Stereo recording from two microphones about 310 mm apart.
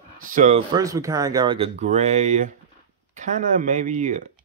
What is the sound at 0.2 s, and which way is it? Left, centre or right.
Speech, right.